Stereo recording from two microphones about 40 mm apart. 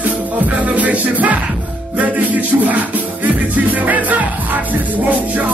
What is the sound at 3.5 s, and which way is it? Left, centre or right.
Speech, right.